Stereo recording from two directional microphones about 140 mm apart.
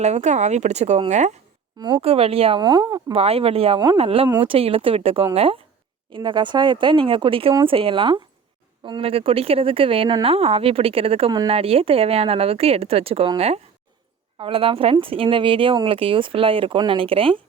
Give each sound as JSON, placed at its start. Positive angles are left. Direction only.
{"t": 0.0, "sound": "speech", "side_deg": -55}
{"t": 1.8, "sound": "speech", "side_deg": -40}
{"t": 2.6, "sound": "speech", "side_deg": -30}
{"t": 3.2, "sound": "speech", "side_deg": -45}